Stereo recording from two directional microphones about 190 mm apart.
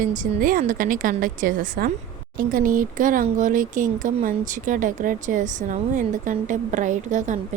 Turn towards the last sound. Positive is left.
turn(degrees=-40)  # may be behind; listen again after turning